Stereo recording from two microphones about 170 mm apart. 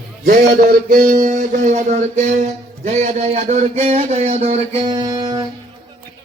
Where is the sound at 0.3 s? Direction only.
60° right (ahead or behind); by 5.5 s 25° right (ahead or behind).